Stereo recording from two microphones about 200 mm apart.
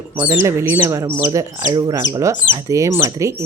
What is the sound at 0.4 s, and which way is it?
Speech, 10° right (ahead or behind).